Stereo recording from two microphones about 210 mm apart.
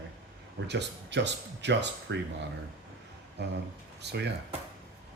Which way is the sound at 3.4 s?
55° right (ahead or behind).